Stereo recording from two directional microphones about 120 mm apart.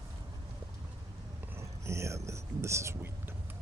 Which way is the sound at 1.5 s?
25° right (ahead or behind).